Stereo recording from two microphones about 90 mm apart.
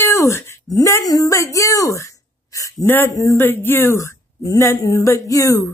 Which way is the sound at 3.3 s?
25° left (ahead or behind).